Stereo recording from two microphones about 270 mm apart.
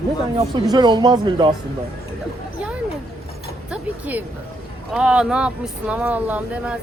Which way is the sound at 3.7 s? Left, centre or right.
Centre.